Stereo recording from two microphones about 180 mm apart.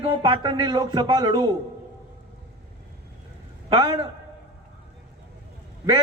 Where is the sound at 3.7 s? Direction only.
25° right (ahead or behind).